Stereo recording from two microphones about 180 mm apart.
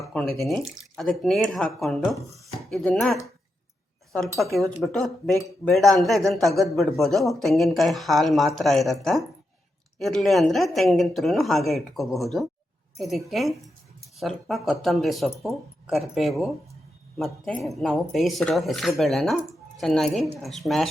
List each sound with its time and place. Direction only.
0.0 s a man's voice: centre (ahead or behind)
4.4 s a man's voice: centre (ahead or behind)